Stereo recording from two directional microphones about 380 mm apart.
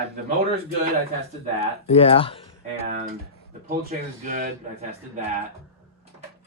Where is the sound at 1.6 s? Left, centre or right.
Centre.